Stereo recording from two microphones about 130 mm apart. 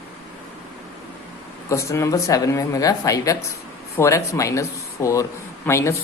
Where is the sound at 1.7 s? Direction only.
20° left (ahead or behind).